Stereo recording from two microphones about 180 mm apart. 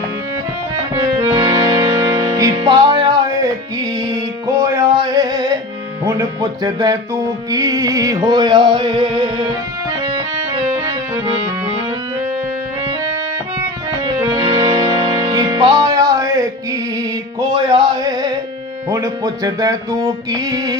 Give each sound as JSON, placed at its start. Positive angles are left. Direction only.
{"t": 0.9, "sound": "music", "side_deg": -25}
{"t": 14.3, "sound": "music", "side_deg": -25}
{"t": 17.5, "sound": "music", "side_deg": -25}